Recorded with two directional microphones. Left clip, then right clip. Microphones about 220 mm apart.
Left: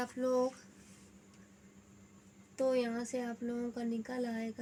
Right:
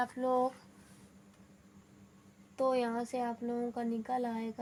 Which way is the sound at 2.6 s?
Centre (ahead or behind).